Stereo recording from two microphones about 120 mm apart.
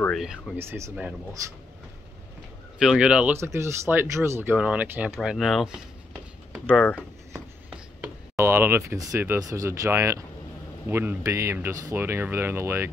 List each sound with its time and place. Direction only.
0.1 s speech: centre (ahead or behind)
0.6 s speech: 20° right (ahead or behind)
2.8 s speech: 5° right (ahead or behind)
3.3 s speech: 25° right (ahead or behind); by 5.8 s 5° right (ahead or behind)
6.5 s a sound: 15° right (ahead or behind)
8.4 s speech: 20° right (ahead or behind)